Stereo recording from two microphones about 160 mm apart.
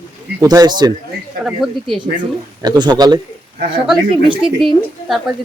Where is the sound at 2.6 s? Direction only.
25° right (ahead or behind).